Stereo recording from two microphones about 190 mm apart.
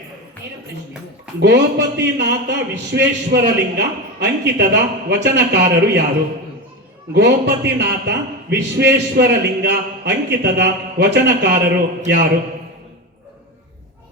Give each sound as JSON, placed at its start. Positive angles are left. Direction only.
{"t": 1.4, "sound": "a man's voice", "side_deg": -65}
{"t": 7.1, "sound": "a man's voice", "side_deg": -65}